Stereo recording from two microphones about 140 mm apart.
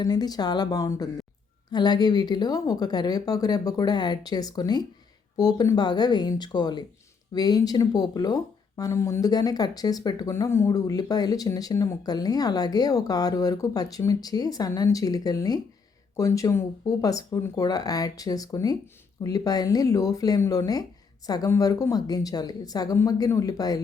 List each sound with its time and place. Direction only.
0.0 s speech: 30° left (ahead or behind)